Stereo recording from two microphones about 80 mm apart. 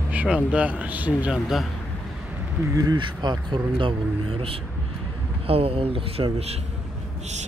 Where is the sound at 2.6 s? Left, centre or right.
Right.